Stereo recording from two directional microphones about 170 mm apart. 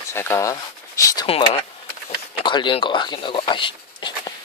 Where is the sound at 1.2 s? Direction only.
30° left (ahead or behind).